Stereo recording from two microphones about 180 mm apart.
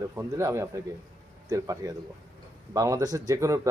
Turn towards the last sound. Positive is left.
turn(degrees=-20)  # may be behind; listen again after turning